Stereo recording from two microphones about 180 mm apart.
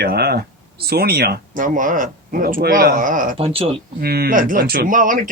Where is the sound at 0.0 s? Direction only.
60° right (ahead or behind).